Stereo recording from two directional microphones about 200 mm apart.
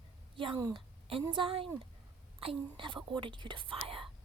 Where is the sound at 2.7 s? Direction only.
25° right (ahead or behind).